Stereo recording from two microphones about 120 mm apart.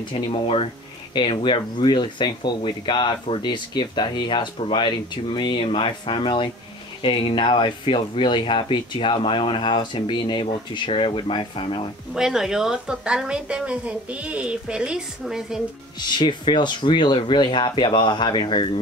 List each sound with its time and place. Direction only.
0.1 s speech: 45° left (ahead or behind)
12.1 s speech: 5° right (ahead or behind)
16.1 s speech: 40° left (ahead or behind)